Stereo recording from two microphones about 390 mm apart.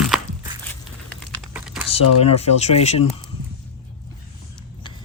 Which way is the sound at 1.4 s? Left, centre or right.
Centre.